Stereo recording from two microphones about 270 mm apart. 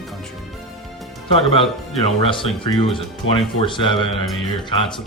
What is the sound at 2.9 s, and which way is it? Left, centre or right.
Speech, centre.